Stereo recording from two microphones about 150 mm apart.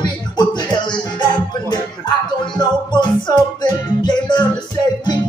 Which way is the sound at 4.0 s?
30° left (ahead or behind).